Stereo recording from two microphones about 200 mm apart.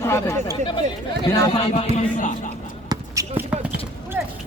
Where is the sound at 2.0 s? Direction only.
40° left (ahead or behind).